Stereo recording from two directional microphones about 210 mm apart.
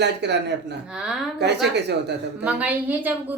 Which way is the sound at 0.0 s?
55° right (ahead or behind).